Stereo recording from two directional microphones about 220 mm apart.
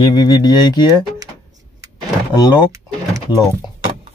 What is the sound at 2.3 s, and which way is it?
Speech, 15° left (ahead or behind).